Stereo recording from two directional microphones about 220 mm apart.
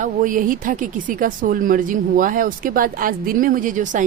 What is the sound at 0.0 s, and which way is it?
A woman's voice, 35° right (ahead or behind).